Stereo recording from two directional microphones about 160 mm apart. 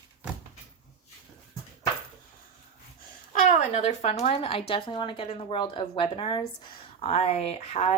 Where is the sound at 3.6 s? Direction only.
50° left (ahead or behind).